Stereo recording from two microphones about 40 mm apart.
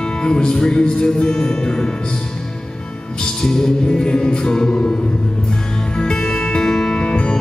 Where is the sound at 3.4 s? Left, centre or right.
Centre.